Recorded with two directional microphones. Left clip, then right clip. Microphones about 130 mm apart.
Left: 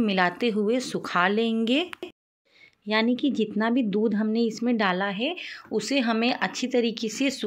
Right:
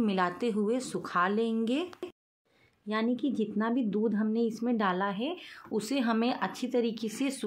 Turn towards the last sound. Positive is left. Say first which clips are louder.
# left 6 dB
turn(degrees=15)  # may be behind; listen again after turning